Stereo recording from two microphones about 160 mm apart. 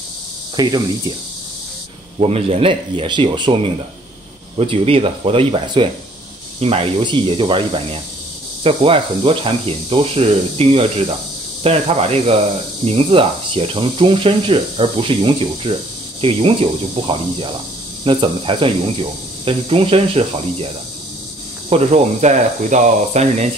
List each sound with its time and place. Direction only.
0.6 s speech: 25° right (ahead or behind)
2.1 s speech: 40° right (ahead or behind)
21.6 s speech: 40° right (ahead or behind)